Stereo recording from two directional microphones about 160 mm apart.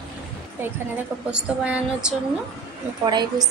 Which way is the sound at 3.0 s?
30° right (ahead or behind).